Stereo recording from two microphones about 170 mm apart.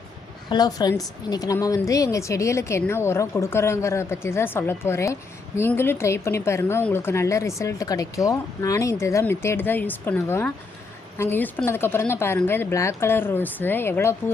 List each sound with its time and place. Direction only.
0.5 s a woman's voice: 25° left (ahead or behind)